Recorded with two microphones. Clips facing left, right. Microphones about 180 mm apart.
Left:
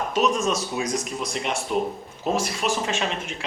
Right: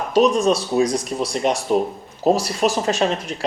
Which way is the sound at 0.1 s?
35° right (ahead or behind).